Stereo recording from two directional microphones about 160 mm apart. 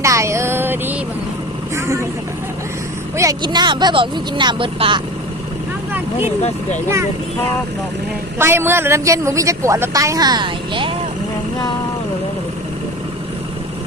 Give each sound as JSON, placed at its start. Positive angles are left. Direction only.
{"t": 0.0, "sound": "a sound", "side_deg": -20}
{"t": 3.2, "sound": "a woman's voice", "side_deg": -25}
{"t": 8.4, "sound": "a woman's voice", "side_deg": -15}